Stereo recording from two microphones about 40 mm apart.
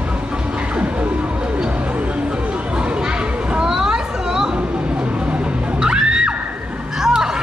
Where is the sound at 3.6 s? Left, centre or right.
Centre.